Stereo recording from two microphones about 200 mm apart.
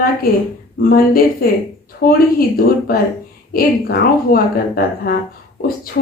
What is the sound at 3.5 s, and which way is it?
A woman's voice, 45° left (ahead or behind).